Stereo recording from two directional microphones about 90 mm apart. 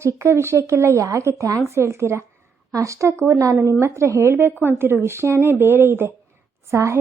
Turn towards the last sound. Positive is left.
turn(degrees=-35)  # may be behind; listen again after turning